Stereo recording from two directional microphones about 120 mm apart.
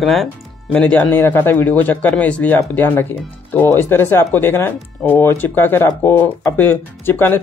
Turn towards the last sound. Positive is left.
turn(degrees=20)  # may be behind; listen again after turning